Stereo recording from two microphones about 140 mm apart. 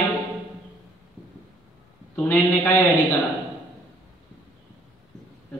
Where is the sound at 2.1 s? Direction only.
15° left (ahead or behind).